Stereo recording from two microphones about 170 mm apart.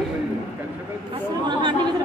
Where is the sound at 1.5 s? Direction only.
25° right (ahead or behind).